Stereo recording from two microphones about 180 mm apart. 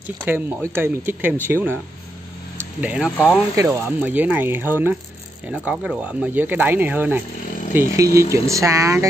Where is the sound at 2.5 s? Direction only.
5° right (ahead or behind).